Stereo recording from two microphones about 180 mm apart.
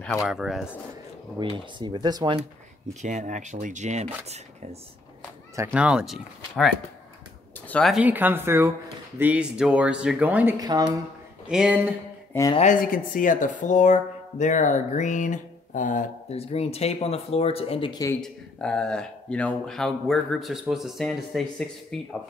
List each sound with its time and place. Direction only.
0.0 s speech: centre (ahead or behind)
1.4 s speech: 25° right (ahead or behind)
2.9 s speech: 40° right (ahead or behind)
5.6 s speech: 10° right (ahead or behind)
7.6 s a sound: 10° left (ahead or behind)
7.9 s speech: 10° right (ahead or behind)
10.6 s speech: 20° right (ahead or behind)
11.4 s speech: 5° right (ahead or behind)
12.3 s speech: 15° left (ahead or behind)
12.8 s speech: 50° left (ahead or behind); by 18.0 s 30° left (ahead or behind)
18.2 s speech: 5° left (ahead or behind)